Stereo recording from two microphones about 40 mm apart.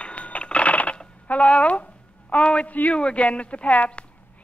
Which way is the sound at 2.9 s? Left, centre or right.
Left.